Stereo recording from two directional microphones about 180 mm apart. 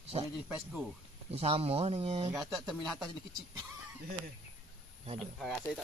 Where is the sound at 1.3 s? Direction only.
35° right (ahead or behind).